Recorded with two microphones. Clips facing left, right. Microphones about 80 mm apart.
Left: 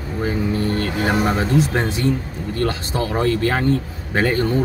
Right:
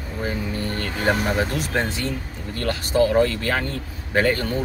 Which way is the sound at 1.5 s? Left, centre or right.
Left.